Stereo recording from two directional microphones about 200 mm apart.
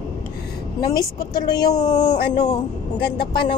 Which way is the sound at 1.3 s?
20° left (ahead or behind).